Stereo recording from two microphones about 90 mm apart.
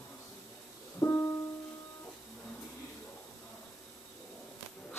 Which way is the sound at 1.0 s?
40° left (ahead or behind).